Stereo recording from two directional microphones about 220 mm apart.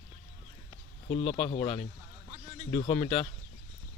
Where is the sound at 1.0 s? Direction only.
25° left (ahead or behind).